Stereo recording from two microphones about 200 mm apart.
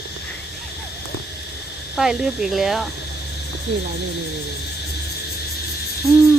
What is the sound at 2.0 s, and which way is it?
Speech, centre (ahead or behind).